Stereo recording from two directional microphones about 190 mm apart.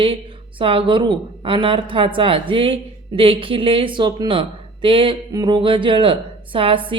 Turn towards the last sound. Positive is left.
turn(degrees=-25)  # may be behind; listen again after turning